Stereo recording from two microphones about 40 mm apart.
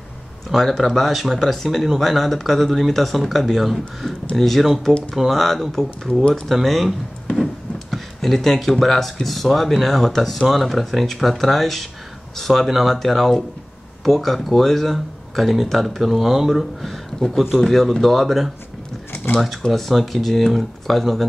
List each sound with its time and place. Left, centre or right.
0.5 s speech: centre
7.9 s speech: centre
17.2 s speech: centre
17.6 s speech: centre
19.7 s speech: centre